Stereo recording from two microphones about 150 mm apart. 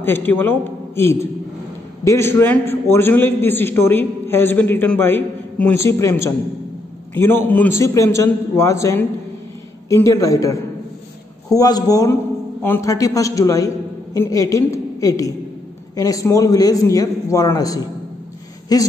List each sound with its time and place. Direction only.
0.0 s a man's voice: 10° left (ahead or behind)